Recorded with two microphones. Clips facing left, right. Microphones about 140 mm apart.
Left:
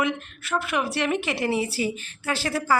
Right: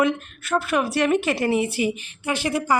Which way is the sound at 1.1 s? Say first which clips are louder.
Right 4 dB; 20° left (ahead or behind).